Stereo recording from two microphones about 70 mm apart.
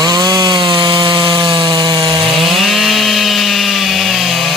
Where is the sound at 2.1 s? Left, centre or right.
Centre.